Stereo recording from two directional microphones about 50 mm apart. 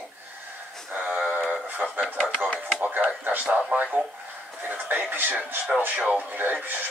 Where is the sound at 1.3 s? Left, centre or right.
Right.